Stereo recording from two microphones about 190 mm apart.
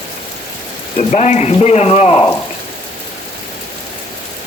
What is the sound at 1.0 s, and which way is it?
Speech, 40° left (ahead or behind).